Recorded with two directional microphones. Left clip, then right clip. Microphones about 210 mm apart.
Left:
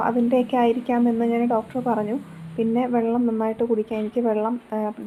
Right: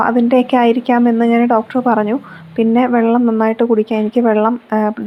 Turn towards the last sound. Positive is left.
turn(degrees=-20)  # may be behind; listen again after turning